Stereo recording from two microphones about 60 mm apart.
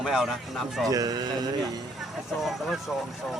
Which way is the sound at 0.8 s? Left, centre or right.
Right.